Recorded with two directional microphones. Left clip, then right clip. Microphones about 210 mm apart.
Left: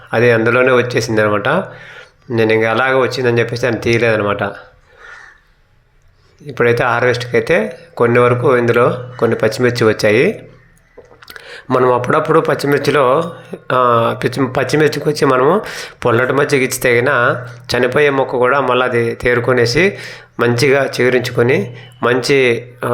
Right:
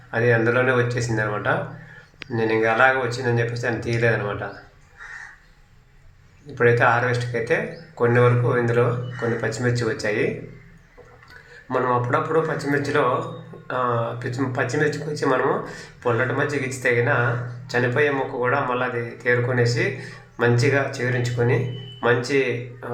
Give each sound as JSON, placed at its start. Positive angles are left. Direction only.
{"t": 0.1, "sound": "speech", "side_deg": 40}
{"t": 6.5, "sound": "speech", "side_deg": 40}
{"t": 11.3, "sound": "speech", "side_deg": 40}